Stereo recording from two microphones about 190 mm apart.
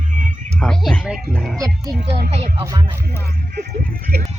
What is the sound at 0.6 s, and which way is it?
Speech, 5° left (ahead or behind).